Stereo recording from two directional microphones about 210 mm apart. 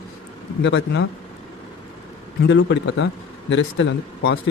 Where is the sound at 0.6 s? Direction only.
55° left (ahead or behind).